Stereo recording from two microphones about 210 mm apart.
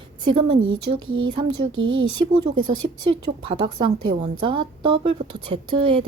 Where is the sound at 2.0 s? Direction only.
20° right (ahead or behind).